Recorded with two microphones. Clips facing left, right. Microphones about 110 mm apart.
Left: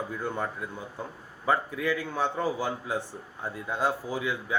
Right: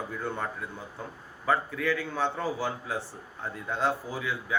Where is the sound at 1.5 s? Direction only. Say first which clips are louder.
Even; 15° left (ahead or behind).